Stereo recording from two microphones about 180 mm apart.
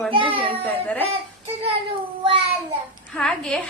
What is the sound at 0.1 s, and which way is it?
Speech, 30° right (ahead or behind).